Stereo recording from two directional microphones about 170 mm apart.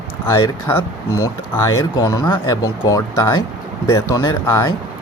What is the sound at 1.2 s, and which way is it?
Speech, 20° left (ahead or behind).